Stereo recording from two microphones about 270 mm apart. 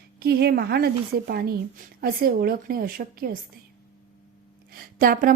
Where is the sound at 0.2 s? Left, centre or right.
Right.